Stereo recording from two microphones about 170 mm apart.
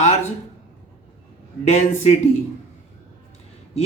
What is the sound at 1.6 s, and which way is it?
Speech, 40° left (ahead or behind).